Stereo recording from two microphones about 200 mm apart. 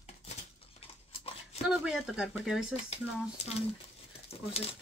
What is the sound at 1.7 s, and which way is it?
Speech, 5° right (ahead or behind).